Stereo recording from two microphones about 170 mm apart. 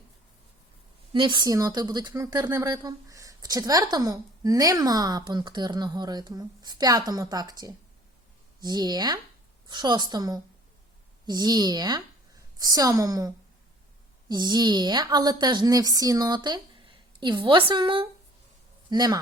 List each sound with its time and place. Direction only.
1.1 s speech: 30° right (ahead or behind)